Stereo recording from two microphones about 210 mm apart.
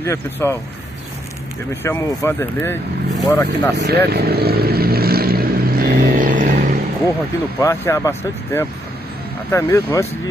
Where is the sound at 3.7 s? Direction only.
50° right (ahead or behind).